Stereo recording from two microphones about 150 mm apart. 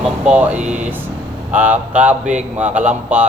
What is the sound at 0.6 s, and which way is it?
Speech, 50° right (ahead or behind).